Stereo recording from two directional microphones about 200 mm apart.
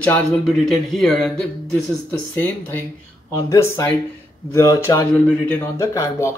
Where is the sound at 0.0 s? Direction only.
5° left (ahead or behind).